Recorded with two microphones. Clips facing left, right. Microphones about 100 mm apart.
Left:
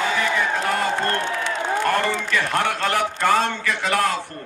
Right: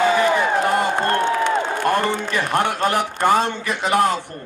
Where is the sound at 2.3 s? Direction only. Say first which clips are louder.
Right 1 dB; 25° right (ahead or behind).